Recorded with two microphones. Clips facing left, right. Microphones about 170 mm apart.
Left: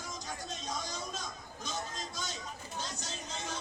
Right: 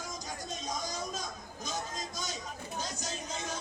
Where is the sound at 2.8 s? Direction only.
45° right (ahead or behind).